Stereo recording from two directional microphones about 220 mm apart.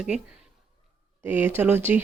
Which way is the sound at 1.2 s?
10° right (ahead or behind).